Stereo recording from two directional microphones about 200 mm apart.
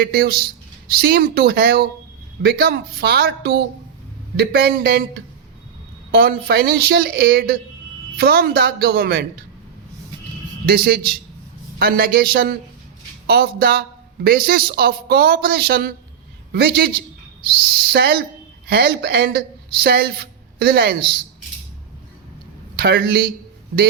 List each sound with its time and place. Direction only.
0.0 s speech: 50° right (ahead or behind)
6.1 s speech: 50° right (ahead or behind)
10.7 s a man's voice: 50° right (ahead or behind)
22.7 s speech: 50° right (ahead or behind)